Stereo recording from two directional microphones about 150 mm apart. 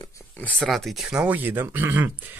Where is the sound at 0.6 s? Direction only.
Centre (ahead or behind).